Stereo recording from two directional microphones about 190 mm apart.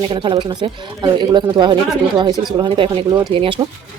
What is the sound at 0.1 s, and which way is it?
Speech, 25° right (ahead or behind).